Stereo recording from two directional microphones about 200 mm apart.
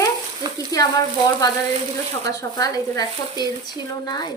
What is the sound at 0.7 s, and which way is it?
Speech, 15° left (ahead or behind).